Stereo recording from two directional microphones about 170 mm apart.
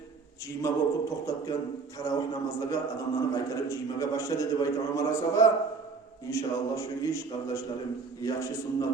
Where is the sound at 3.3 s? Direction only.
20° left (ahead or behind).